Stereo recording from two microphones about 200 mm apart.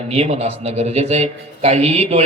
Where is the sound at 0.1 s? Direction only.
30° right (ahead or behind).